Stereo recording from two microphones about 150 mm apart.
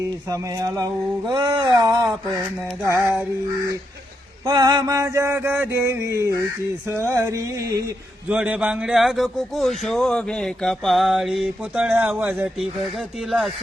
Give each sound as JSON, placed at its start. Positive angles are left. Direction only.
{"t": 0.3, "sound": "a sound", "side_deg": -20}
{"t": 4.4, "sound": "mantra", "side_deg": -30}
{"t": 8.3, "sound": "a man's voice", "side_deg": -5}